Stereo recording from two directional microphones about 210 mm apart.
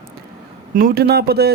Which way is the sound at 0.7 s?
45° right (ahead or behind).